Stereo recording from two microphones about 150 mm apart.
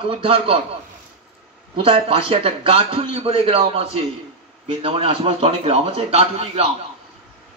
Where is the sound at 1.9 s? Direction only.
40° right (ahead or behind).